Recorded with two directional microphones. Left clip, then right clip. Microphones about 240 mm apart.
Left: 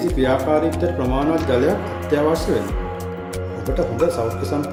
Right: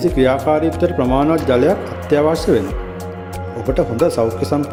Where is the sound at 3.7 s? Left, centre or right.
Right.